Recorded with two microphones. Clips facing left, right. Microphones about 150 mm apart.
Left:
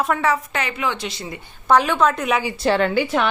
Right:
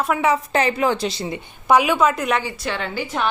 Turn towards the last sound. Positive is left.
turn(degrees=65)  # may be behind; listen again after turning